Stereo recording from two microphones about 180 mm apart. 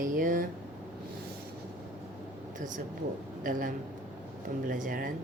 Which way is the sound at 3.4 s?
50° right (ahead or behind).